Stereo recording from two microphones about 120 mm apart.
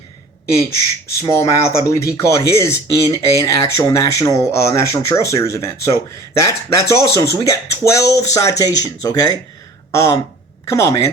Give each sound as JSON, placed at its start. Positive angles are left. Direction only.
{"t": 1.2, "sound": "speech", "side_deg": 25}